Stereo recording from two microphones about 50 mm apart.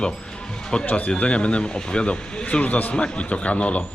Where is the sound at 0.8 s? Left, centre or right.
Left.